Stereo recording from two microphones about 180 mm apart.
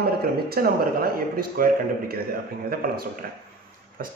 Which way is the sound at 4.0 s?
50° right (ahead or behind).